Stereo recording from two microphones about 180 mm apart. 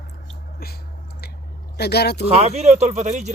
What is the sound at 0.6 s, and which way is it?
Speech, 60° left (ahead or behind).